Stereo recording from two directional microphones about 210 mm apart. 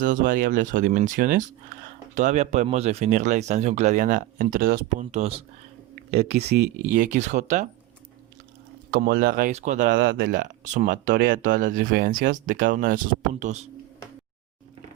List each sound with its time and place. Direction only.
0.0 s speech: 40° right (ahead or behind)
6.5 s speech: 45° right (ahead or behind)
8.9 s speech: 45° right (ahead or behind)
9.5 s speech: 35° right (ahead or behind)